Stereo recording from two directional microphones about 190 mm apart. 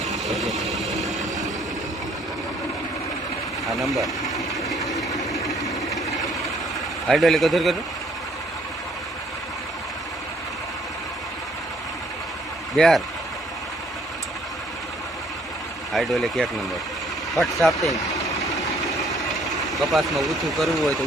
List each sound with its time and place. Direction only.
0.0 s vehicle: centre (ahead or behind)
3.7 s speech: centre (ahead or behind)
5.3 s vehicle: centre (ahead or behind)
7.1 s speech: centre (ahead or behind)
12.7 s speech: centre (ahead or behind)
15.9 s speech: centre (ahead or behind)
17.9 s vehicle: 15° left (ahead or behind)
19.7 s speech: centre (ahead or behind)